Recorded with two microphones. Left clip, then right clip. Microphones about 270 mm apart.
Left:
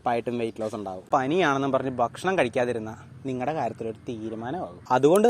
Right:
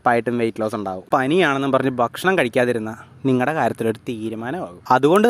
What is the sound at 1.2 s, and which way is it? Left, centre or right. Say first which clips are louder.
Speech: right 7 dB; right.